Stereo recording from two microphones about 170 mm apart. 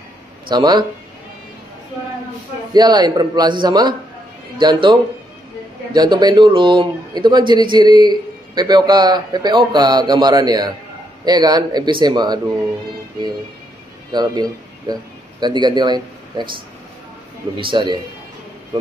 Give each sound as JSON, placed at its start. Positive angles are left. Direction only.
{"t": 0.5, "sound": "a man's voice", "side_deg": -25}
{"t": 2.7, "sound": "a man's voice", "side_deg": -25}
{"t": 5.9, "sound": "a man's voice", "side_deg": -25}
{"t": 14.1, "sound": "a man's voice", "side_deg": -25}
{"t": 17.6, "sound": "a man's voice", "side_deg": -30}